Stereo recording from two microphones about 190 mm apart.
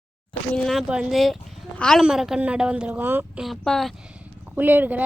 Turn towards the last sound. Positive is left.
turn(degrees=-10)  # may be behind; listen again after turning